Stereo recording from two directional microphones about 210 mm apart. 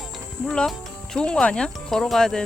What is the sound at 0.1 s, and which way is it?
Speech, centre (ahead or behind).